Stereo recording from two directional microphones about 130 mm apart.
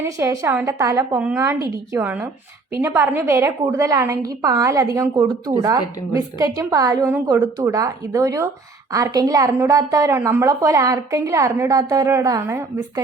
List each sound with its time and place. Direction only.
0.0 s a woman's voice: 20° right (ahead or behind)
1.1 s speech: 10° right (ahead or behind)
1.4 s a woman's voice: 25° right (ahead or behind)
2.0 s a woman's voice: 15° right (ahead or behind)